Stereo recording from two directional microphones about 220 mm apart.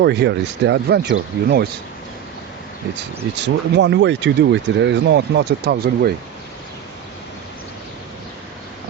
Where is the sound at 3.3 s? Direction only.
55° right (ahead or behind).